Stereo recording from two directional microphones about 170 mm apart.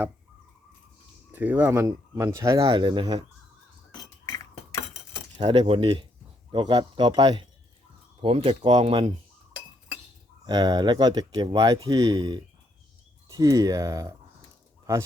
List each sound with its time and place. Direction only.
1.3 s speech: 10° right (ahead or behind); by 3.2 s 30° right (ahead or behind)
5.4 s speech: 30° right (ahead or behind)
10.4 s speech: 25° right (ahead or behind)